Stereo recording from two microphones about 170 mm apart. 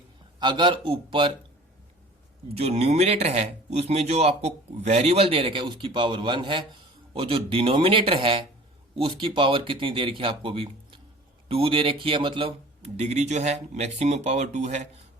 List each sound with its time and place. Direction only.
0.3 s a man's voice: 25° right (ahead or behind)
2.6 s speech: 40° right (ahead or behind)